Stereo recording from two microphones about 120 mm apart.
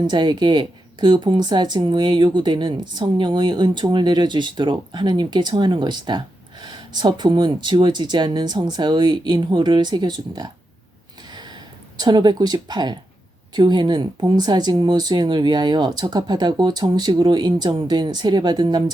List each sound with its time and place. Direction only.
0.1 s speech: 40° right (ahead or behind)
11.3 s a sound: 35° right (ahead or behind)
13.5 s speech: 35° right (ahead or behind)